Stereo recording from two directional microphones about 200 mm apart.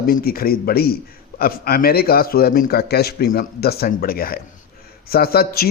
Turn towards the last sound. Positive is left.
turn(degrees=50)  # may be behind; listen again after turning